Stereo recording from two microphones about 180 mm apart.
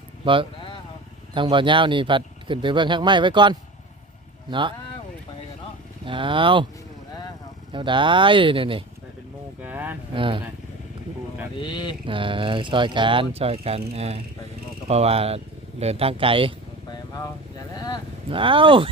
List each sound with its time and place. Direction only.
1.3 s speech: 25° right (ahead or behind)
6.1 s speech: 30° right (ahead or behind)
7.7 s speech: 25° right (ahead or behind)
9.6 s a sound: 10° right (ahead or behind)
10.2 s speech: 30° right (ahead or behind)
11.6 s speech: 25° left (ahead or behind)
12.0 s a man's voice: 30° right (ahead or behind)
17.7 s a sound: 20° left (ahead or behind)
18.3 s speech: 30° right (ahead or behind)